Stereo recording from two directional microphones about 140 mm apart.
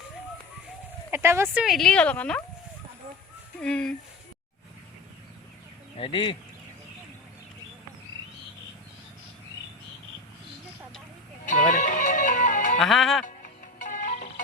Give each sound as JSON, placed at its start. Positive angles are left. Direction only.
{"t": 1.1, "sound": "speech", "side_deg": -20}
{"t": 1.6, "sound": "speech", "side_deg": 0}
{"t": 3.6, "sound": "speech", "side_deg": 5}
{"t": 6.0, "sound": "speech", "side_deg": 35}
{"t": 11.7, "sound": "music", "side_deg": 65}
{"t": 12.8, "sound": "speech", "side_deg": 0}
{"t": 13.2, "sound": "music", "side_deg": 65}